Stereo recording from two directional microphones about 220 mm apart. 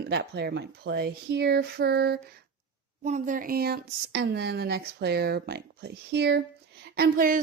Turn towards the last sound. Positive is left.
turn(degrees=-40)  # may be behind; listen again after turning